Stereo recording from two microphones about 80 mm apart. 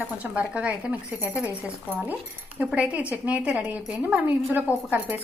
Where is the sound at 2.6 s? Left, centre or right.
Centre.